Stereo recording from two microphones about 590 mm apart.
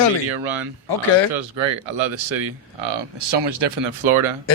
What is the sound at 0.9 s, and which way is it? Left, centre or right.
Speech, left.